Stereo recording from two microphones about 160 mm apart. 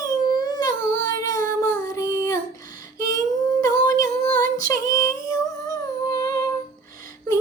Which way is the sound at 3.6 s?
55° right (ahead or behind).